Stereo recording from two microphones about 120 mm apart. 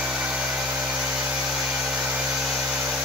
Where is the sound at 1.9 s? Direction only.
10° right (ahead or behind).